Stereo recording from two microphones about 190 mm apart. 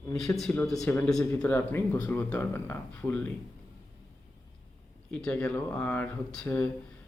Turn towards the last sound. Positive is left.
turn(degrees=5)  # may be behind; listen again after turning